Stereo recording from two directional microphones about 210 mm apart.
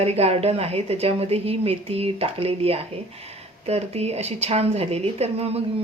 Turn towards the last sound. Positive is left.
turn(degrees=-30)  # may be behind; listen again after turning